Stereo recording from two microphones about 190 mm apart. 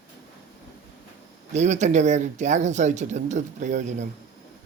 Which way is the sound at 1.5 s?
40° right (ahead or behind).